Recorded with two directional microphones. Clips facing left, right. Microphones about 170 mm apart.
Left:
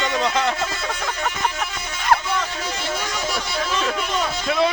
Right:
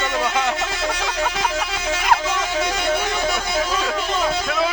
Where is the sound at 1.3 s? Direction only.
90° right; by 3.6 s 55° right (ahead or behind).